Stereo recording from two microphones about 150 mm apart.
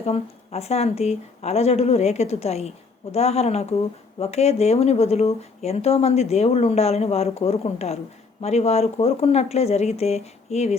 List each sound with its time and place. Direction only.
0.0 s speech: 45° left (ahead or behind)